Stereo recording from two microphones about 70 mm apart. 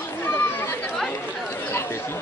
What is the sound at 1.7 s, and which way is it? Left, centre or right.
Chatter, left.